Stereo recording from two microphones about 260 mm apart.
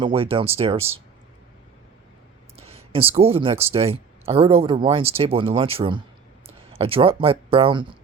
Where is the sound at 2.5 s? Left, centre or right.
Right.